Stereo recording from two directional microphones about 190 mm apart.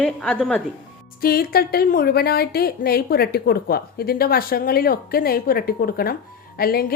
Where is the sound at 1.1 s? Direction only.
50° left (ahead or behind).